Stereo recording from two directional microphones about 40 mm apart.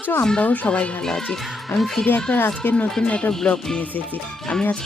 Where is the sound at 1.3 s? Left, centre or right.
Centre.